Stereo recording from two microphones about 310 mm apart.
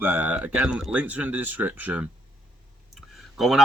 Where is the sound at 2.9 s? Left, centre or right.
Centre.